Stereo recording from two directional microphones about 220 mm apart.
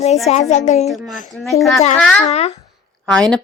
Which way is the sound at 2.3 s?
30° left (ahead or behind).